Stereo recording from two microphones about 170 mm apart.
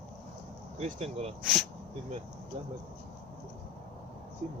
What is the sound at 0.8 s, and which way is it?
Speech, 40° right (ahead or behind).